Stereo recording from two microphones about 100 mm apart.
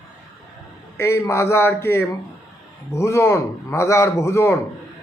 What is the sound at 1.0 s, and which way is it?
A man's voice, 30° left (ahead or behind).